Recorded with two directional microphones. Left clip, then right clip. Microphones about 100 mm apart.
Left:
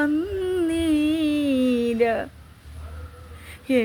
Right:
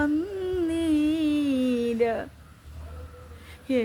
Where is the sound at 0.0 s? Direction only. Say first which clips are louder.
Left 3 dB; 10° left (ahead or behind).